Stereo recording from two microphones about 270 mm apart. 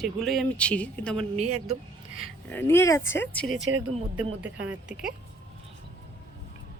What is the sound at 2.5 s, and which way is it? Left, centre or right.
Speech, centre.